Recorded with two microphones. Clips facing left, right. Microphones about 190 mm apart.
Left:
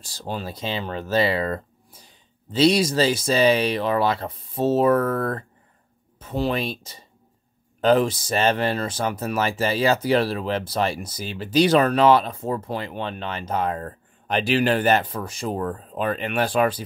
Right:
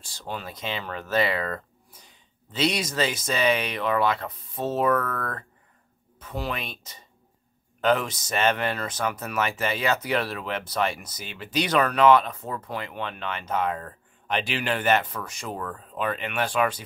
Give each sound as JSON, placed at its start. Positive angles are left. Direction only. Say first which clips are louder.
{"t": 0.0, "sound": "speech", "louder": "left 4 dB", "side_deg": 35}